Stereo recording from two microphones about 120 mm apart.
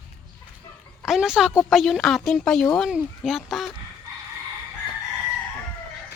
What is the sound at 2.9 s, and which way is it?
Speech, 5° right (ahead or behind).